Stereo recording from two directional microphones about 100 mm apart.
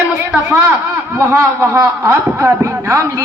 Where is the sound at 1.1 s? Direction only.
25° right (ahead or behind).